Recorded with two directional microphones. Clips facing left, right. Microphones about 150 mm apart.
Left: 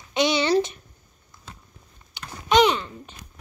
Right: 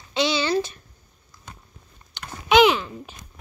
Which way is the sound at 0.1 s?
20° left (ahead or behind).